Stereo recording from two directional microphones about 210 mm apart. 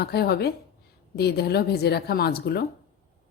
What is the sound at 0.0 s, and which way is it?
A woman's voice, 50° left (ahead or behind).